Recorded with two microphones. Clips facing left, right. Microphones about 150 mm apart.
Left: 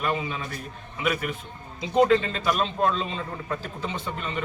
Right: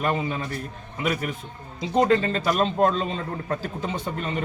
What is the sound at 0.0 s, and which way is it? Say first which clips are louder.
Speech: right 3 dB; 45° right (ahead or behind).